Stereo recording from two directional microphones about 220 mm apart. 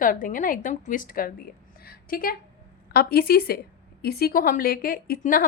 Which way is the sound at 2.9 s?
45° left (ahead or behind).